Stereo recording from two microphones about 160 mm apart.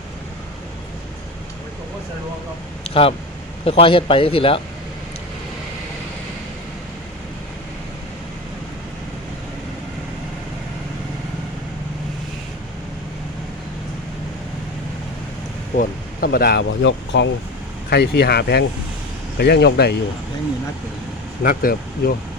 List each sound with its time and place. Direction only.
2.9 s speech: 35° left (ahead or behind)
15.7 s speech: 65° left (ahead or behind)
17.1 s speech: 90° left
21.4 s speech: 65° left (ahead or behind)